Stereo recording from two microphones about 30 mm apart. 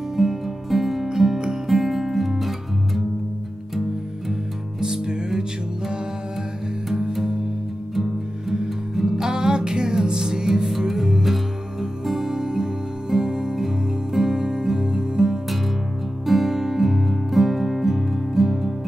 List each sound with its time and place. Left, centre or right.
0.1 s music: centre
4.7 s music: right
7.9 s music: centre
9.3 s music: right
14.1 s music: centre
16.3 s music: centre